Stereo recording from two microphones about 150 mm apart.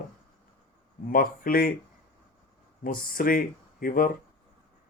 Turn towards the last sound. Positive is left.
turn(degrees=75)  # may be behind; listen again after turning